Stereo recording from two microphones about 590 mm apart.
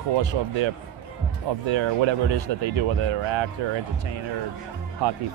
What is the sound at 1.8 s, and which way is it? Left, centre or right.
Speech, right.